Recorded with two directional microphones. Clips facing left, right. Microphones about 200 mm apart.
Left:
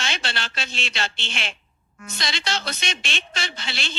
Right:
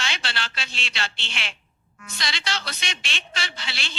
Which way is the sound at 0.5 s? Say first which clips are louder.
Left 4 dB; 45° left (ahead or behind).